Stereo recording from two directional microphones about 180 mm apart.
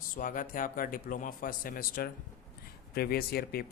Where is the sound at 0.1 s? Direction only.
50° left (ahead or behind).